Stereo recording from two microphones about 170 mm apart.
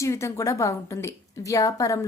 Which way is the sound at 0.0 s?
15° left (ahead or behind).